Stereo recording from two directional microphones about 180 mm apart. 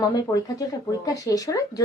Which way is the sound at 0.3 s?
15° left (ahead or behind).